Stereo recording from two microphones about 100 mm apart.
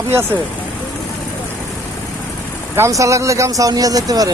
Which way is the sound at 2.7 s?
30° right (ahead or behind).